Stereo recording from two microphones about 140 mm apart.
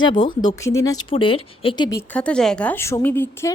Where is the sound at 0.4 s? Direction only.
20° left (ahead or behind).